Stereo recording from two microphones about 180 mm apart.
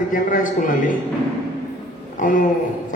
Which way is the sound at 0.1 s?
50° left (ahead or behind).